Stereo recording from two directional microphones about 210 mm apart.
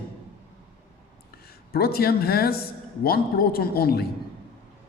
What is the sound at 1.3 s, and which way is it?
A man's voice, 45° left (ahead or behind).